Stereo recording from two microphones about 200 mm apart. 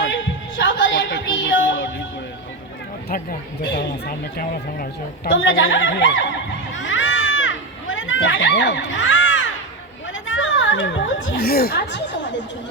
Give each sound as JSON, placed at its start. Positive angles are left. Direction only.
{"t": 0.6, "sound": "a sound", "side_deg": 65}
{"t": 1.4, "sound": "music", "side_deg": 75}
{"t": 3.6, "sound": "speech", "side_deg": 50}
{"t": 5.3, "sound": "speech", "side_deg": 75}
{"t": 6.7, "sound": "a sound", "side_deg": 70}
{"t": 11.4, "sound": "speech", "side_deg": 50}